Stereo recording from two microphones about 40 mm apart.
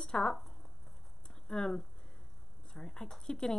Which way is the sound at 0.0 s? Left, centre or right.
Centre.